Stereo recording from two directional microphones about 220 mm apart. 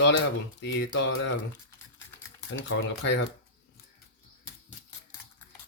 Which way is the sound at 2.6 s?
55° left (ahead or behind).